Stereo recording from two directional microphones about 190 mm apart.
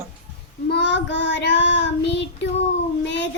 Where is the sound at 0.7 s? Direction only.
65° left (ahead or behind).